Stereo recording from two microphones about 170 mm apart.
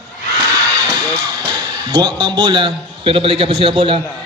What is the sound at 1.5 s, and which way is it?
A man's voice, 25° right (ahead or behind).